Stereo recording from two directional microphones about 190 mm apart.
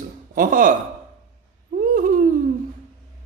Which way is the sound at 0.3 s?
45° right (ahead or behind).